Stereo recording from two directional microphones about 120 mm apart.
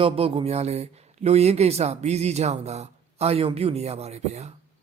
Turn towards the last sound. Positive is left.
turn(degrees=-65)  # may be behind; listen again after turning